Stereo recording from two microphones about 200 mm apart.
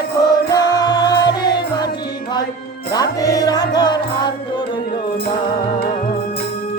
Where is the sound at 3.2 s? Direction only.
20° left (ahead or behind).